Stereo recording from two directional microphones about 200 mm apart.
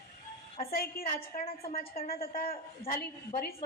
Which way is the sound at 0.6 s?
50° left (ahead or behind).